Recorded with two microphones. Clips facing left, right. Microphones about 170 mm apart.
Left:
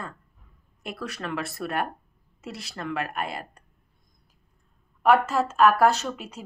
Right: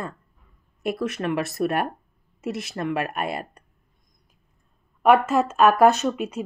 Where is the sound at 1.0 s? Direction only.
20° right (ahead or behind).